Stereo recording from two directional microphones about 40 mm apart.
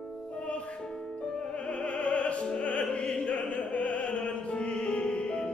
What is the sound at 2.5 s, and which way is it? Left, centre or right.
Music, left.